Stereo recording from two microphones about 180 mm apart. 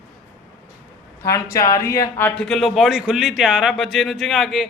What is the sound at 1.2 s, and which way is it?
Speech, 15° left (ahead or behind).